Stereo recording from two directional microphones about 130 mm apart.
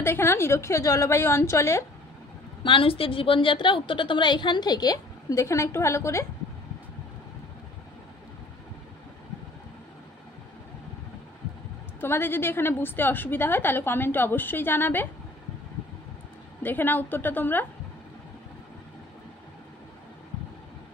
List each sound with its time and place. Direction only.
0.0 s a woman's voice: 20° left (ahead or behind)
2.6 s a woman's voice: 40° left (ahead or behind); by 6.2 s 20° left (ahead or behind)
12.0 s a woman's voice: 15° left (ahead or behind)
16.6 s a woman's voice: 15° left (ahead or behind)